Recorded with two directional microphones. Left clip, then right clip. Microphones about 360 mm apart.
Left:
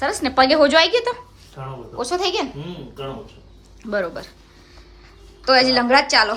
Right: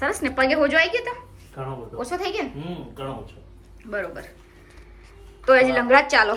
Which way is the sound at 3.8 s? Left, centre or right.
Centre.